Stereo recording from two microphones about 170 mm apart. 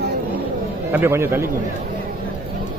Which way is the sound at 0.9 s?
15° right (ahead or behind).